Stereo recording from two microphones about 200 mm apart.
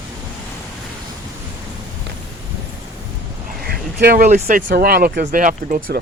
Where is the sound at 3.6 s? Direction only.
50° right (ahead or behind).